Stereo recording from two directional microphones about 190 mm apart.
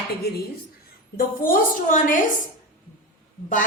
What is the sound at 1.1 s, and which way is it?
A woman's voice, 50° left (ahead or behind).